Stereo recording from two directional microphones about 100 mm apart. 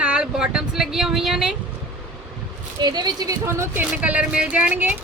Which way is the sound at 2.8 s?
45° right (ahead or behind).